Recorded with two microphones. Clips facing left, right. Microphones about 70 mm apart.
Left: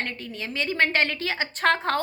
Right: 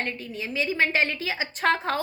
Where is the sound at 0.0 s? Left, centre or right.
Left.